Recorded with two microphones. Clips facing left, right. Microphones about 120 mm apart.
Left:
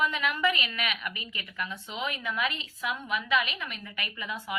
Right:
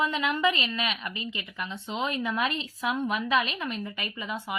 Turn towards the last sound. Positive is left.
turn(degrees=-25)  # may be behind; listen again after turning